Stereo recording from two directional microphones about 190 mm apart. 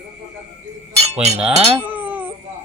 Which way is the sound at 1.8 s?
10° right (ahead or behind).